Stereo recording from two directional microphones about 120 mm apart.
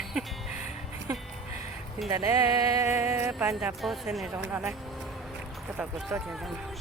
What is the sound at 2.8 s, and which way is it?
Music, 20° right (ahead or behind).